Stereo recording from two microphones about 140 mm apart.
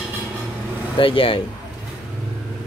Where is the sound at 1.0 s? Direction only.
40° left (ahead or behind).